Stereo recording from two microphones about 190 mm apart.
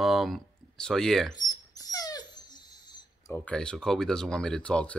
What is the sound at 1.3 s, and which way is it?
Dog, 20° left (ahead or behind).